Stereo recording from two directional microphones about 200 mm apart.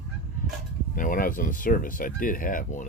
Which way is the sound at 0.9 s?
45° left (ahead or behind).